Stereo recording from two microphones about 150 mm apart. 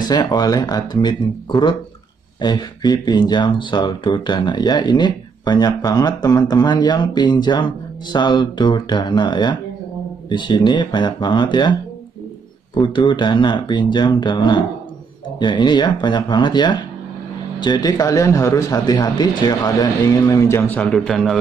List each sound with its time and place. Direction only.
0.0 s speech: 25° left (ahead or behind)
12.7 s speech: 30° left (ahead or behind); by 21.4 s centre (ahead or behind)